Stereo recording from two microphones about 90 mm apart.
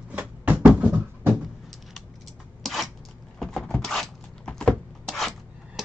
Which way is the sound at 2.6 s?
Centre (ahead or behind).